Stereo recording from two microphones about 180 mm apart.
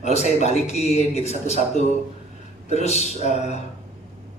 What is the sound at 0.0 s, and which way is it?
Speech, 40° left (ahead or behind).